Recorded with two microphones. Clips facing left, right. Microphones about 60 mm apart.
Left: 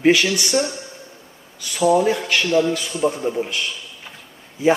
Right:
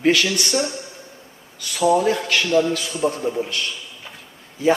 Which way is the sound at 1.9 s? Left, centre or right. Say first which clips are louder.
Left 1 dB; centre.